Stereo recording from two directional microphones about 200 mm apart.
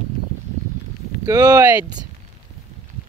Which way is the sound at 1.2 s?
15° right (ahead or behind).